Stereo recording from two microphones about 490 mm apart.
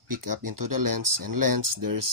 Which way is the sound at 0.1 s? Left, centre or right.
Right.